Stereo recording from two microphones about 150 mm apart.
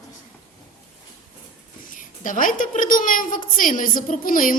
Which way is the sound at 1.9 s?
60° left (ahead or behind).